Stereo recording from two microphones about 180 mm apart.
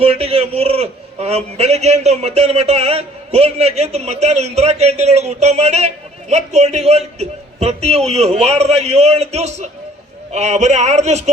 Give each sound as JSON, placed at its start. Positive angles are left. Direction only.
{"t": 0.0, "sound": "a man's voice", "side_deg": -35}